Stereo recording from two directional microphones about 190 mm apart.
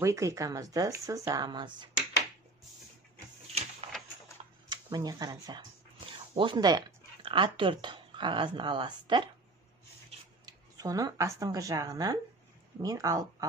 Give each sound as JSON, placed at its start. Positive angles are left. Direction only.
{"t": 0.0, "sound": "speech", "side_deg": -15}
{"t": 3.8, "sound": "a sound", "side_deg": -30}
{"t": 4.6, "sound": "speech", "side_deg": -20}
{"t": 10.4, "sound": "speech", "side_deg": -20}